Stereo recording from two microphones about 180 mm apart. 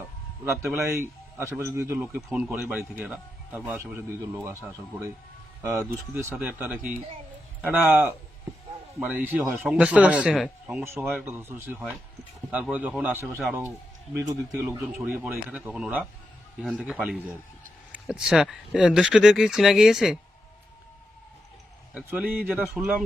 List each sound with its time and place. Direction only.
0.4 s speech: 15° right (ahead or behind)
10.8 s speech: 15° right (ahead or behind)
14.3 s speech: 15° right (ahead or behind)
14.9 s speech: 5° right (ahead or behind)
21.9 s speech: 5° right (ahead or behind)